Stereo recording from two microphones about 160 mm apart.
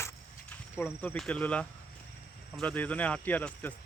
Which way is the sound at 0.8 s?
10° left (ahead or behind).